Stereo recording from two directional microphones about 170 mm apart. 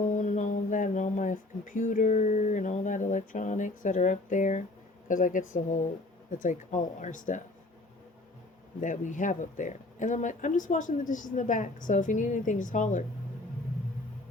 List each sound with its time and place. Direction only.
0.0 s a sound: 45° left (ahead or behind)
5.0 s speech: 50° left (ahead or behind)
8.8 s speech: 45° left (ahead or behind)